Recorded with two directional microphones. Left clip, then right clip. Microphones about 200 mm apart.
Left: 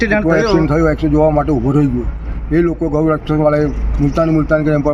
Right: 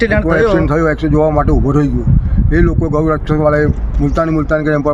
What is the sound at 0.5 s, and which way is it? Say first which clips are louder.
Speech: even; 5° left (ahead or behind).